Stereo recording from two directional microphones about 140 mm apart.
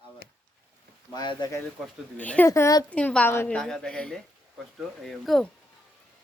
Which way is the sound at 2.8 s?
10° left (ahead or behind).